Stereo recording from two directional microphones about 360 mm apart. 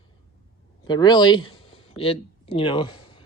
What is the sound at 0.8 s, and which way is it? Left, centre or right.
Speech, centre.